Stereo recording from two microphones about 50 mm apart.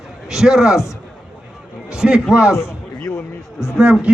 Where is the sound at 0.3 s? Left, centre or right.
Centre.